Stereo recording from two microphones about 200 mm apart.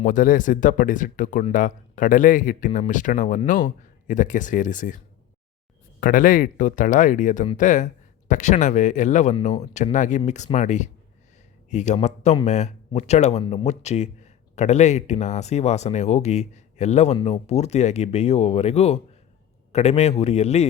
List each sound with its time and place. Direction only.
0.0 s speech: 40° left (ahead or behind)
6.0 s speech: 45° left (ahead or behind)